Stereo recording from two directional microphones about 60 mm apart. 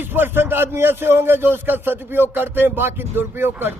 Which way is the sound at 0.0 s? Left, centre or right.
Right.